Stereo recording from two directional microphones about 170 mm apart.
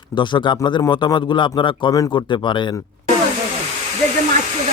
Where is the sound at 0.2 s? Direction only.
25° left (ahead or behind).